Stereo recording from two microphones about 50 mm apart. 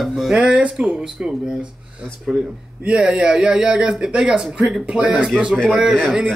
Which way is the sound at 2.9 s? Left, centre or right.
Centre.